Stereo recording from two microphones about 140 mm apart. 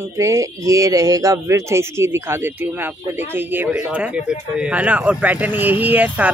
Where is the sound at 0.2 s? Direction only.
20° right (ahead or behind).